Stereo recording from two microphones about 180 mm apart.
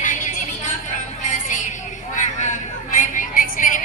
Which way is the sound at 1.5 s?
45° left (ahead or behind).